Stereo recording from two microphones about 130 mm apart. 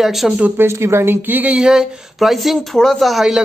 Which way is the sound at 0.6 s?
20° right (ahead or behind).